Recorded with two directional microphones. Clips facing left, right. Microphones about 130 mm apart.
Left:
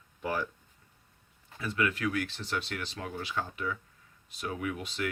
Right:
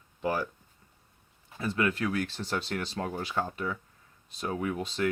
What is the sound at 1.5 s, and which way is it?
Speech, 30° right (ahead or behind).